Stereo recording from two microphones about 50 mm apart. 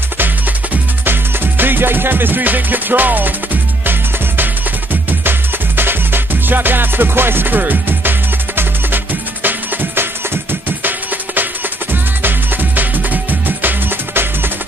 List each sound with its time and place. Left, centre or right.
1.0 s music: right
5.8 s music: right